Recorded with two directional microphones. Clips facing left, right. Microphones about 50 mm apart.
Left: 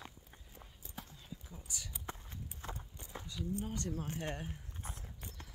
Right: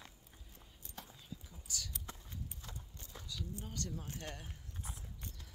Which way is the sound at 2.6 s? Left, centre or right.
Left.